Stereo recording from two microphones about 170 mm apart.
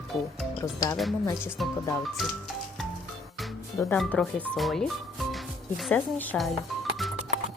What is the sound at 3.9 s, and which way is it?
Speech, 5° left (ahead or behind).